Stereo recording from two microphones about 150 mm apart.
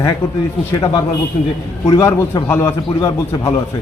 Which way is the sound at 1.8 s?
25° left (ahead or behind).